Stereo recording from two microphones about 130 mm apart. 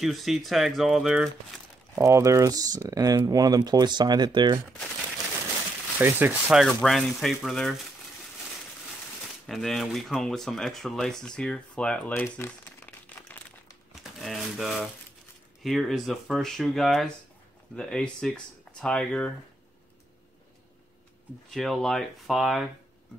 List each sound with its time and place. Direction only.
0.0 s speech: centre (ahead or behind)
2.0 s speech: 25° right (ahead or behind)
5.9 s speech: 15° right (ahead or behind)
6.5 s speech: centre (ahead or behind)
9.5 s speech: centre (ahead or behind)
12.1 s crumpling: 20° left (ahead or behind)
13.9 s a sound: centre (ahead or behind)
15.6 s speech: centre (ahead or behind)
21.5 s speech: centre (ahead or behind)